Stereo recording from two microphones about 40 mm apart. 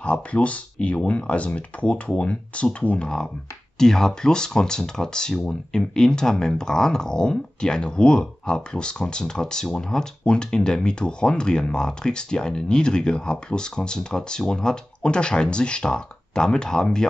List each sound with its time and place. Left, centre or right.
0.0 s speech: left
3.7 s speech: centre